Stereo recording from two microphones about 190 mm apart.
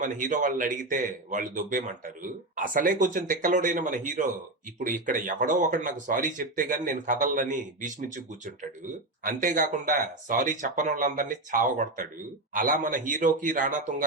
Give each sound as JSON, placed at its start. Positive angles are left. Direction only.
{"t": 0.0, "sound": "a man's voice", "side_deg": -45}